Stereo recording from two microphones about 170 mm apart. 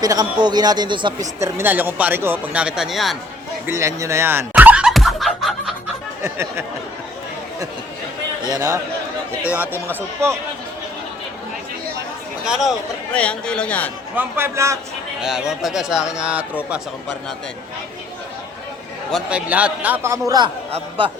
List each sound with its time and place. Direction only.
0.0 s a man's voice: 20° right (ahead or behind)
1.4 s speech: 15° right (ahead or behind); by 3.2 s centre (ahead or behind)
3.7 s chicken: 15° right (ahead or behind); by 5.7 s centre (ahead or behind)
6.2 s speech: 15° right (ahead or behind)
8.4 s a man's voice: 20° right (ahead or behind)
9.4 s speech: 10° right (ahead or behind)
13.1 s a man's voice: 5° left (ahead or behind)
14.2 s speech: 15° right (ahead or behind)
15.2 s speech: 5° right (ahead or behind)
19.1 s speech: 5° right (ahead or behind)